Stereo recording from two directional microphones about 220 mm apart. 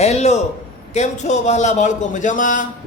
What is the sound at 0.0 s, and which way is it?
A man's voice, 30° left (ahead or behind).